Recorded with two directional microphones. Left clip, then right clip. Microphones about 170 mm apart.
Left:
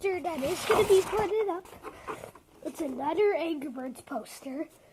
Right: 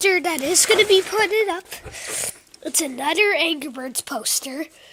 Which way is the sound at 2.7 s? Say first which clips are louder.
Right 9 dB; 30° right (ahead or behind).